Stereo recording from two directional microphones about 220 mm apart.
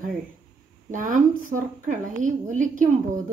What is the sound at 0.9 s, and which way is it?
A woman's voice, 35° right (ahead or behind).